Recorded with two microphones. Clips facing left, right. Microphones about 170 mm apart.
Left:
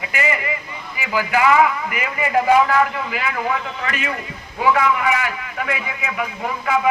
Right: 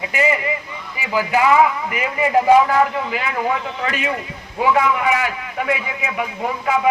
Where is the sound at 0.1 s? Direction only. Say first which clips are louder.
Right 3 dB; 30° right (ahead or behind).